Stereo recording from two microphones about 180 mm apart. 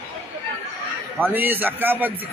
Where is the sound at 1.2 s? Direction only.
10° right (ahead or behind).